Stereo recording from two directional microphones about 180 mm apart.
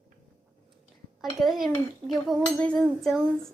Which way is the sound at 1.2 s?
Centre (ahead or behind).